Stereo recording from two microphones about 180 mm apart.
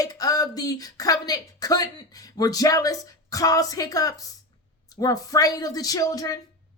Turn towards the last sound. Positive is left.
turn(degrees=20)  # may be behind; listen again after turning